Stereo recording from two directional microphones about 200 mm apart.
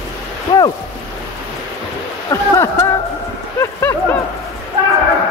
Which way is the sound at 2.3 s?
15° left (ahead or behind).